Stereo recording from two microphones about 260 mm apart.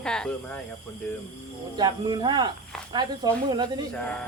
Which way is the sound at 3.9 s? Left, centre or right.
Centre.